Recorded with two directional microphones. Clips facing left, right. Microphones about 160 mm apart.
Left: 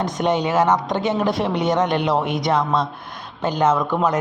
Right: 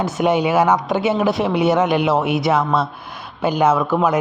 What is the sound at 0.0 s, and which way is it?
A man's voice, 10° right (ahead or behind).